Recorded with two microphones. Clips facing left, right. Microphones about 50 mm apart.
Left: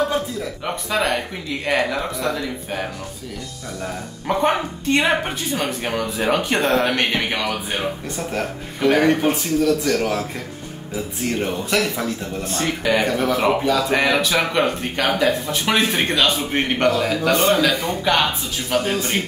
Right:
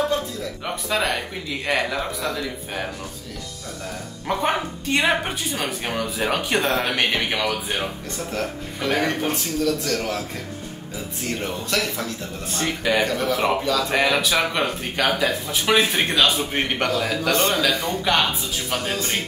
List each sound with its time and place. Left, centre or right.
0.8 s speech: centre
4.3 s speech: centre
11.3 s speech: centre
12.4 s speech: centre
13.9 s speech: centre